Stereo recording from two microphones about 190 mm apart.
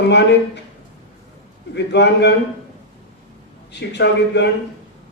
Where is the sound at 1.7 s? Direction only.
65° left (ahead or behind).